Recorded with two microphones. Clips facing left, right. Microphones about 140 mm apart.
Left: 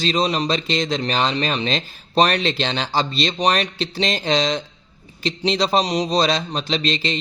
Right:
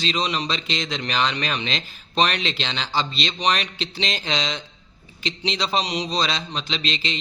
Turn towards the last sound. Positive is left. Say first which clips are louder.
# left 6 dB
turn(degrees=40)  # may be behind; listen again after turning